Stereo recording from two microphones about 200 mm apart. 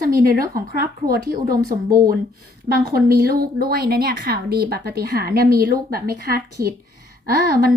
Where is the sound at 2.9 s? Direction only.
50° right (ahead or behind).